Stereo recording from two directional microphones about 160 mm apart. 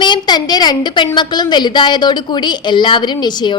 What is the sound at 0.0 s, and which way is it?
A woman's voice, 30° left (ahead or behind).